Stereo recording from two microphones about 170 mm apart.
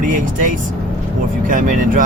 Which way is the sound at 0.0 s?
50° right (ahead or behind).